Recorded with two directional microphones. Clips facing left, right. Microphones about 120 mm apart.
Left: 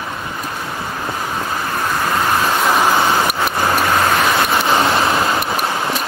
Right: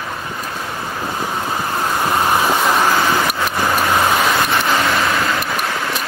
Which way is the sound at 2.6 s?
5° left (ahead or behind).